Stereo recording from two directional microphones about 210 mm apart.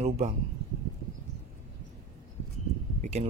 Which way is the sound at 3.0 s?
35° right (ahead or behind).